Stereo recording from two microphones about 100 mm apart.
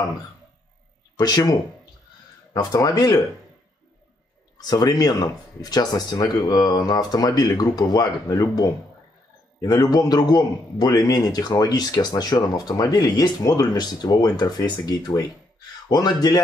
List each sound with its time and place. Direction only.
1.1 s a man's voice: 40° left (ahead or behind)
4.6 s a man's voice: 40° left (ahead or behind)